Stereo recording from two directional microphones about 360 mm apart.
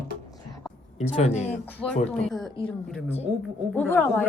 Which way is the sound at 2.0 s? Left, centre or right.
Centre.